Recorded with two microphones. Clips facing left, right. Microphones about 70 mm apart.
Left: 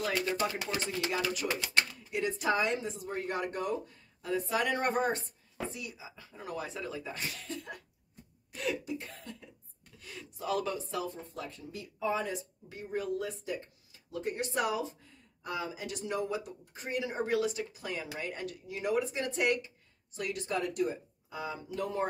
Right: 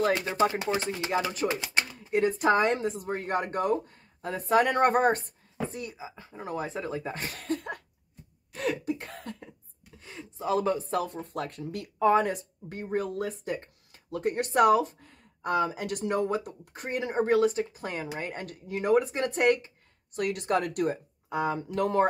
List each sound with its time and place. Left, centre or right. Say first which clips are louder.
0.1 s speech: right 6 dB; right
1.5 s speech: right 2 dB; right
2.0 s speech: right 7 dB; right
9.9 s a sound: right 4 dB; right
10.9 s speech: right 7 dB; right
20.2 s speech: right 7 dB; right